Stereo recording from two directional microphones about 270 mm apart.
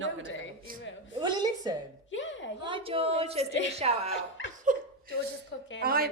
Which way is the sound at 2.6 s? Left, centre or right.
Centre.